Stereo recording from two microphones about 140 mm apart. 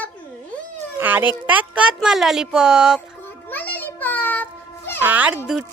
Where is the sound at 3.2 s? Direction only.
15° left (ahead or behind).